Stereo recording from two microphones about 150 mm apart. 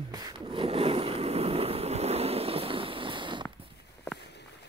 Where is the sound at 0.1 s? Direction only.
30° right (ahead or behind).